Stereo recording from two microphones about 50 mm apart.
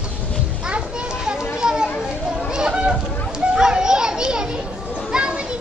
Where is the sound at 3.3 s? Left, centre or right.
Centre.